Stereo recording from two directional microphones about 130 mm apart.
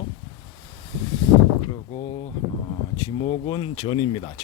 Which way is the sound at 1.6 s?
40° left (ahead or behind).